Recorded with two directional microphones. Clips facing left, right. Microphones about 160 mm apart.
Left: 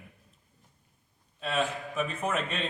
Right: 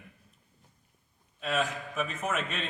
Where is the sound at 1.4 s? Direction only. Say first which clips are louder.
Left 1 dB; 30° left (ahead or behind).